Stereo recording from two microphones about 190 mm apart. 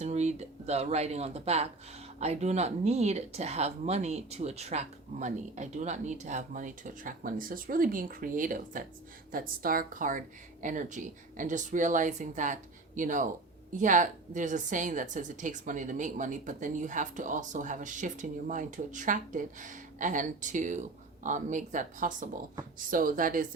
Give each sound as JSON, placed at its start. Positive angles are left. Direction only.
{"t": 0.0, "sound": "a woman's voice", "side_deg": -35}